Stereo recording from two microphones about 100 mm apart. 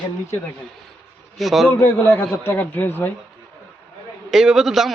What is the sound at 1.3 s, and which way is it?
Speech, centre (ahead or behind).